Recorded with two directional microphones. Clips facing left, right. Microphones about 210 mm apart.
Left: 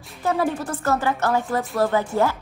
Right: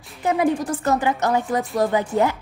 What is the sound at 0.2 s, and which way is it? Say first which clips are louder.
A woman's voice: right 3 dB; 15° right (ahead or behind).